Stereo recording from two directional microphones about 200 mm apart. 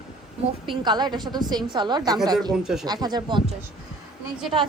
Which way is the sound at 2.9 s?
20° right (ahead or behind).